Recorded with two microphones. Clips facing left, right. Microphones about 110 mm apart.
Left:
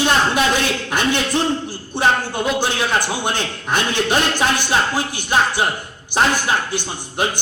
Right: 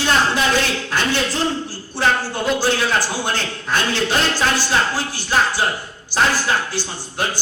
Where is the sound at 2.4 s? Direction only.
20° left (ahead or behind).